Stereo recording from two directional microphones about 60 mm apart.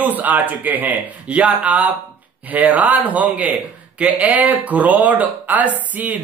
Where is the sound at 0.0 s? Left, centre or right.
Right.